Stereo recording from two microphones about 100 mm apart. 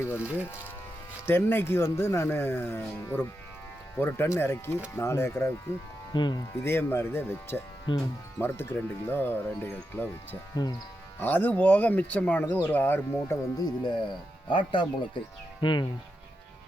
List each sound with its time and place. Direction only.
0.2 s speech: 15° right (ahead or behind)
1.3 s speech: 20° left (ahead or behind)
6.1 s speech: 50° left (ahead or behind)
6.6 s speech: 25° left (ahead or behind)
7.9 s speech: 50° left (ahead or behind)
8.4 s speech: 20° left (ahead or behind)
10.5 s speech: 40° left (ahead or behind)
11.2 s speech: 20° left (ahead or behind)
13.6 s speech: 50° left (ahead or behind)